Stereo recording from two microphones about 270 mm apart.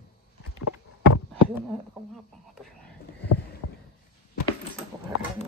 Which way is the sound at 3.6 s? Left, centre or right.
Left.